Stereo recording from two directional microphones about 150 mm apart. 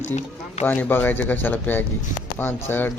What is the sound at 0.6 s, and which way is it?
Speech, 10° left (ahead or behind).